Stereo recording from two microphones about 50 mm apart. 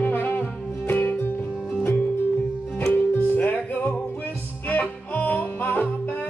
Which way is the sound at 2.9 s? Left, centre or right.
Left.